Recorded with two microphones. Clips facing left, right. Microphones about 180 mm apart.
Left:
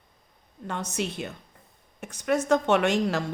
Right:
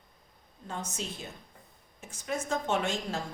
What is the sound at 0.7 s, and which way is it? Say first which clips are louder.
Speech: left 7 dB; 70° left (ahead or behind).